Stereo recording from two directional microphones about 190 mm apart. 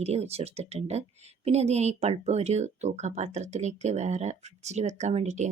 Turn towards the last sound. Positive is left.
turn(degrees=-35)  # may be behind; listen again after turning